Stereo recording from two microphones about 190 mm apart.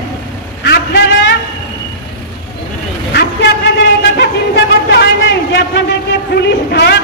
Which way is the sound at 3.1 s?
60° left (ahead or behind).